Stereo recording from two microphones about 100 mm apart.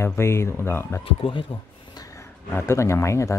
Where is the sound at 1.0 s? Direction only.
60° left (ahead or behind).